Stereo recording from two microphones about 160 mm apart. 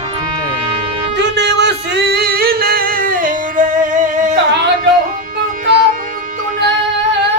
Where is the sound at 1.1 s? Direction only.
90° right; by 4.3 s 55° right (ahead or behind).